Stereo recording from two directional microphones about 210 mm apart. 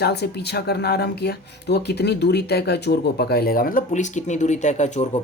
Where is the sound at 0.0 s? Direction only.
50° left (ahead or behind).